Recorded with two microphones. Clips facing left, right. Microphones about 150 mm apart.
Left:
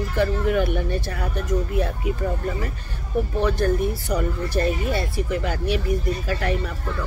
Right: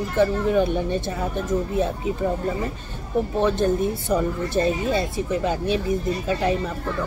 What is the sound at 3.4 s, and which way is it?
Speech, 20° right (ahead or behind).